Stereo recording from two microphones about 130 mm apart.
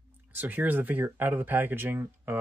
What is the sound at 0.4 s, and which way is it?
Speech, 15° right (ahead or behind).